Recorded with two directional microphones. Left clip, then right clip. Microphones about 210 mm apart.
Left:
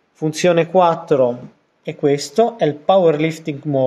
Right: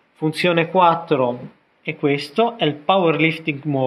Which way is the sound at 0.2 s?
55° left (ahead or behind).